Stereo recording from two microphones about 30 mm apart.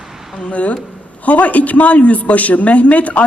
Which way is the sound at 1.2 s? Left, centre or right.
Left.